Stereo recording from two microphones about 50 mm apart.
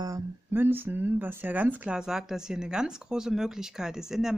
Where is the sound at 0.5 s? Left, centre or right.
Right.